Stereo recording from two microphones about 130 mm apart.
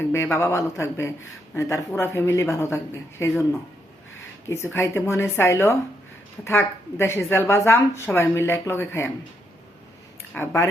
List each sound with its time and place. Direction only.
0.0 s a woman's voice: 20° left (ahead or behind)
4.4 s a woman's voice: 20° left (ahead or behind)
10.3 s a woman's voice: 20° left (ahead or behind)